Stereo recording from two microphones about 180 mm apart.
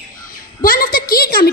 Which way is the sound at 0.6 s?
50° left (ahead or behind).